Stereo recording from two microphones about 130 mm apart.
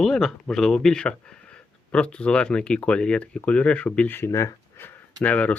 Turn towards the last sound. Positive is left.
turn(degrees=10)  # may be behind; listen again after turning